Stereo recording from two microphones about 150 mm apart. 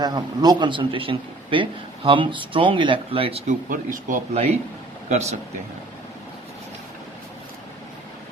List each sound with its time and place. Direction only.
0.0 s a man's voice: 30° right (ahead or behind)
3.4 s speech: 65° right (ahead or behind)
5.0 s a man's voice: 45° right (ahead or behind)